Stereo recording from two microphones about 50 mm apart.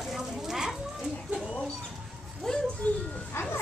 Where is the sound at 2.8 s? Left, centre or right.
Left.